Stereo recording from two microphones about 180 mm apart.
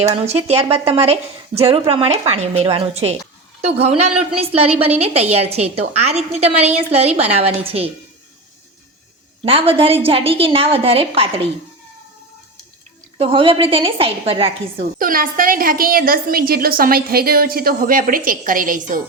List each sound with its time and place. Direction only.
0.1 s a woman's voice: 35° right (ahead or behind)
9.4 s a woman's voice: 30° right (ahead or behind)
13.1 s a woman's voice: 30° right (ahead or behind)
14.9 s a woman's voice: 50° right (ahead or behind)